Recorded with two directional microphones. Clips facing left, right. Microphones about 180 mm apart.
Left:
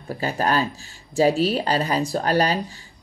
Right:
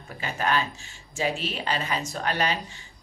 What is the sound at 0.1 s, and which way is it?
Speech, 35° left (ahead or behind).